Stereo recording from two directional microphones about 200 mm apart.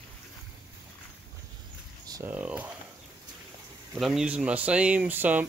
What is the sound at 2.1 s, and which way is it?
Speech, 10° right (ahead or behind).